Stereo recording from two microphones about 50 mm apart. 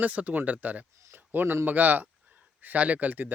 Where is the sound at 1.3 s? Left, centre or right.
Right.